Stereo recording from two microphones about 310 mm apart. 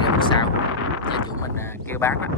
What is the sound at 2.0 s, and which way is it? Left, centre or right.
Speech, centre.